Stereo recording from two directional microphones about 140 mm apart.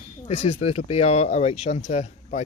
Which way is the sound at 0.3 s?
45° left (ahead or behind).